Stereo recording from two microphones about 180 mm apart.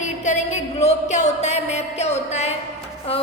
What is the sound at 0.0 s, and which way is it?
A woman's voice, 40° left (ahead or behind).